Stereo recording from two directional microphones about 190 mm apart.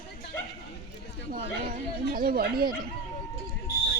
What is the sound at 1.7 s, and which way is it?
Chatter, 50° right (ahead or behind).